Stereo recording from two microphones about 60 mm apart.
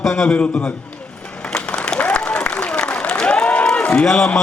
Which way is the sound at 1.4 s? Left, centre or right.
Centre.